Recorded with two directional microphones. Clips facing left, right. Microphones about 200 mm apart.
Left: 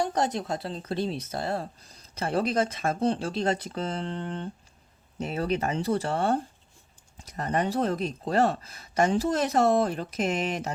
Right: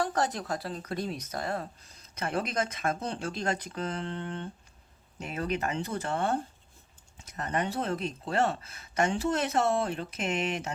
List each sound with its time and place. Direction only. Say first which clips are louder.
0.0 s speech: left 3 dB; 20° left (ahead or behind); by 10.8 s 35° left (ahead or behind)